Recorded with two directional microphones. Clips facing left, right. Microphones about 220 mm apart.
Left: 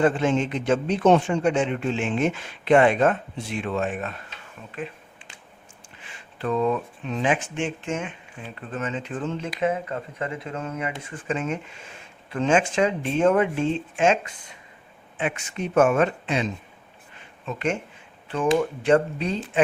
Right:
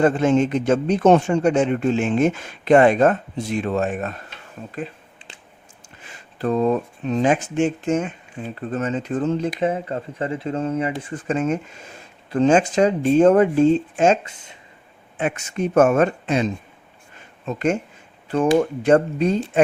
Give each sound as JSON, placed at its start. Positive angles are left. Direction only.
{"t": 0.0, "sound": "speech", "side_deg": -45}
{"t": 6.0, "sound": "speech", "side_deg": -40}
{"t": 14.3, "sound": "speech", "side_deg": -25}
{"t": 15.2, "sound": "speech", "side_deg": -45}